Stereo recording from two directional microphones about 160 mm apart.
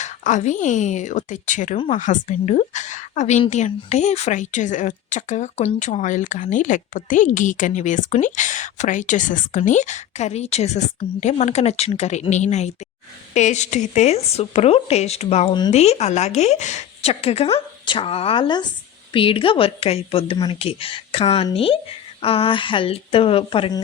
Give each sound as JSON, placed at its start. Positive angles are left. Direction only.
{"t": 0.0, "sound": "a woman's voice", "side_deg": 50}
{"t": 15.4, "sound": "speech", "side_deg": 30}
{"t": 15.7, "sound": "speech", "side_deg": 40}